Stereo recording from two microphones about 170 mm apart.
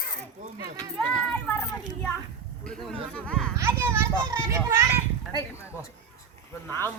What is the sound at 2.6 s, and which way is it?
Speech, 5° left (ahead or behind).